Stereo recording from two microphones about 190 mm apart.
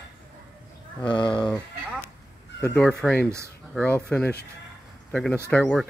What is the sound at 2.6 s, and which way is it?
Speech, 5° left (ahead or behind).